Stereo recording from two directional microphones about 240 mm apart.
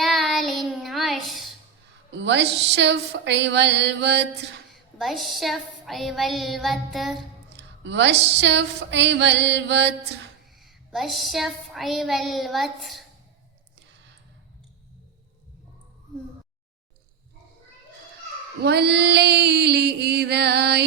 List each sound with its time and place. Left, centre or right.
0.0 s child singing: centre
2.1 s speech: right
4.7 s child singing: centre
7.5 s speech: right
10.9 s child singing: centre
18.6 s speech: right